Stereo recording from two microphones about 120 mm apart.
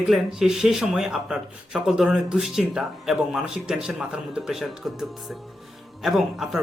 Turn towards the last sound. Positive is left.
turn(degrees=0)  # may be behind; listen again after turning